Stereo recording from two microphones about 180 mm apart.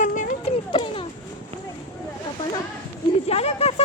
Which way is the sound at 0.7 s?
25° left (ahead or behind).